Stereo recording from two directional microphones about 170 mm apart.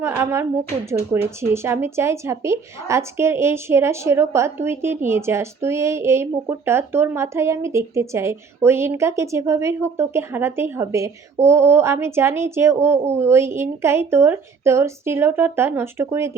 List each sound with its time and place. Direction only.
0.0 s a woman's voice: 15° right (ahead or behind)